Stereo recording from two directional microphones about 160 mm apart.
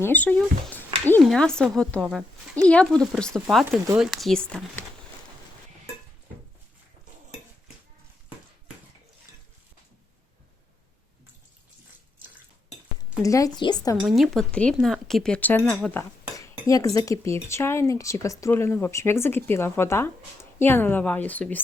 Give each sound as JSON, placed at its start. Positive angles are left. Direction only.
{"t": 0.0, "sound": "speech", "side_deg": 10}
{"t": 13.2, "sound": "a woman's voice", "side_deg": 20}
{"t": 14.2, "sound": "speech", "side_deg": 5}
{"t": 16.3, "sound": "cutlery", "side_deg": 20}